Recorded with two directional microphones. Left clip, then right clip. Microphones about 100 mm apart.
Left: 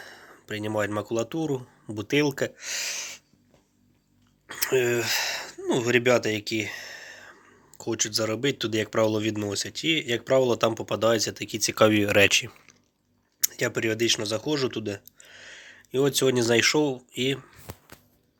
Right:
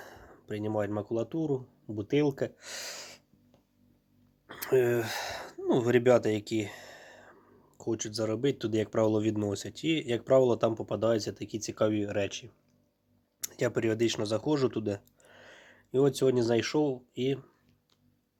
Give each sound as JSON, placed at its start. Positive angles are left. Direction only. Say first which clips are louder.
{"t": 0.0, "sound": "a sound", "louder": "left 4 dB", "side_deg": -60}
{"t": 0.3, "sound": "a sound", "louder": "left 3 dB", "side_deg": -30}
{"t": 0.7, "sound": "speech", "louder": "left 5 dB", "side_deg": -15}
{"t": 2.6, "sound": "speech", "louder": "left 10 dB", "side_deg": -50}
{"t": 4.4, "sound": "a sound", "louder": "left 2 dB", "side_deg": -40}
{"t": 5.6, "sound": "speech", "louder": "left 2 dB", "side_deg": -50}
{"t": 7.3, "sound": "speech", "louder": "left 6 dB", "side_deg": -25}
{"t": 10.6, "sound": "speech", "louder": "left 5 dB", "side_deg": -20}
{"t": 11.8, "sound": "speech", "louder": "left 10 dB", "side_deg": 30}
{"t": 13.4, "sound": "speech", "louder": "left 4 dB", "side_deg": -35}
{"t": 16.1, "sound": "speech", "louder": "left 5 dB", "side_deg": -10}